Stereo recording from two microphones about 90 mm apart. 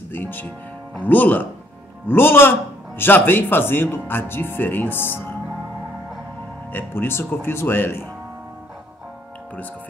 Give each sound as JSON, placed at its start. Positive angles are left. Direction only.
{"t": 0.1, "sound": "speech", "side_deg": 20}
{"t": 6.7, "sound": "speech", "side_deg": 25}